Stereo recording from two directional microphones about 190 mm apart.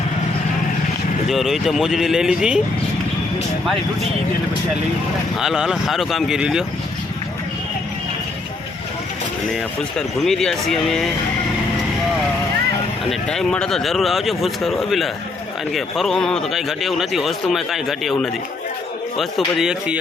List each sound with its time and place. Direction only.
1.3 s speech: centre (ahead or behind)
5.4 s speech: centre (ahead or behind)
10.2 s speech: centre (ahead or behind)
13.1 s speech: 5° left (ahead or behind)
19.5 s speech: 5° right (ahead or behind)